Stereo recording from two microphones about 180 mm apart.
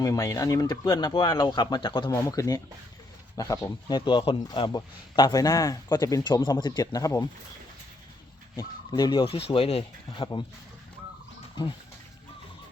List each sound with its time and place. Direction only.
0.0 s speech: 20° left (ahead or behind)
8.5 s speech: 20° left (ahead or behind)